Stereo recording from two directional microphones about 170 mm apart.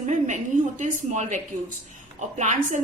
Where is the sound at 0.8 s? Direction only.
45° right (ahead or behind).